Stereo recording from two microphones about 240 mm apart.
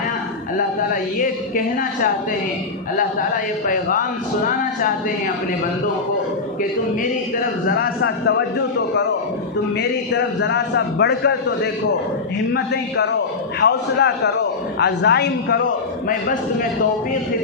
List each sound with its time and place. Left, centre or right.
1.2 s speech: left
3.2 s speech: left
7.8 s a man's voice: left
10.1 s a man's voice: left